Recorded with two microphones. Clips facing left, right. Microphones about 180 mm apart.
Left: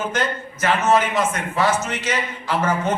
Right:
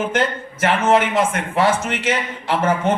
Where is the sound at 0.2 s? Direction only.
30° right (ahead or behind).